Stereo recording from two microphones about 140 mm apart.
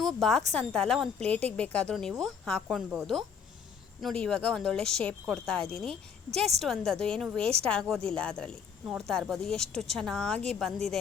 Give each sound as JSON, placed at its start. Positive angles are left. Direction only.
{"t": 0.0, "sound": "speech", "side_deg": 0}